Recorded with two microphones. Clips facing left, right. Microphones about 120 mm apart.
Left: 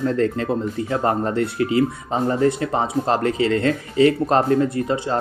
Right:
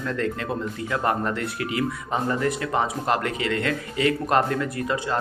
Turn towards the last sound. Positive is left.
turn(degrees=30)  # may be behind; listen again after turning